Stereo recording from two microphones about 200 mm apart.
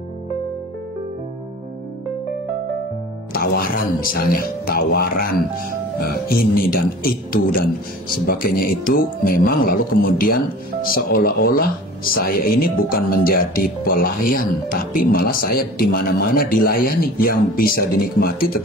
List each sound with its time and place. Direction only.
3.3 s speech: 45° left (ahead or behind)